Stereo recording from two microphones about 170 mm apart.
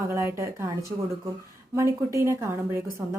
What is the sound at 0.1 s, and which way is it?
A woman's voice, 15° right (ahead or behind).